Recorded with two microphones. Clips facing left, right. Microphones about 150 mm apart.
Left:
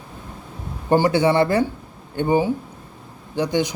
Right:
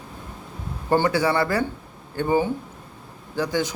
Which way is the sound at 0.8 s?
20° left (ahead or behind).